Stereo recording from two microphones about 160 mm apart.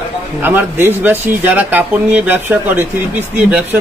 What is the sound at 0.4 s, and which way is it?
Speech, 10° right (ahead or behind).